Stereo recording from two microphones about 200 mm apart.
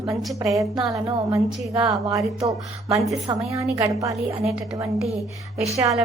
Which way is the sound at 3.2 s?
15° right (ahead or behind).